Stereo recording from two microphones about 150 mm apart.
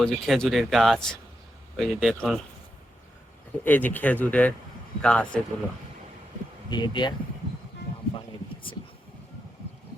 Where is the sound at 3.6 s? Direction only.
10° left (ahead or behind).